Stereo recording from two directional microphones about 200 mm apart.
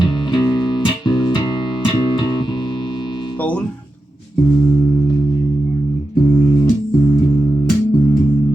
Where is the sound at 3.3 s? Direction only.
10° left (ahead or behind).